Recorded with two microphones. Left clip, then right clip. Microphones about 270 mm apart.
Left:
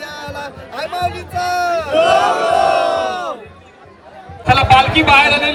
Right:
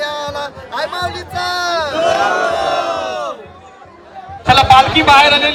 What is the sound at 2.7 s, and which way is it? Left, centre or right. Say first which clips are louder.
Crowd: left 2 dB; left.